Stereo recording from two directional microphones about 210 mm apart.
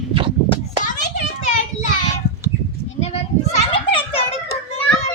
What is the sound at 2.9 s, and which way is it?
Children playing, 30° left (ahead or behind).